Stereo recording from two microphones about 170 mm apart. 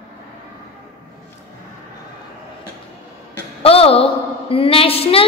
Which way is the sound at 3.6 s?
35° left (ahead or behind).